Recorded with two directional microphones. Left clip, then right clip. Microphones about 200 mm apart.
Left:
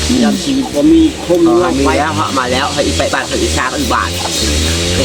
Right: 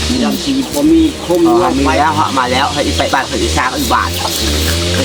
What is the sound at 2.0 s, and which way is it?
Music, 25° right (ahead or behind).